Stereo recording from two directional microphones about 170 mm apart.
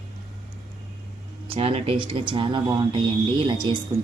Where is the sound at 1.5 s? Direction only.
35° right (ahead or behind).